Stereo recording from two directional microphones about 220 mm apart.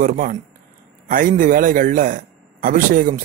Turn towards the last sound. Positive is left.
turn(degrees=-35)  # may be behind; listen again after turning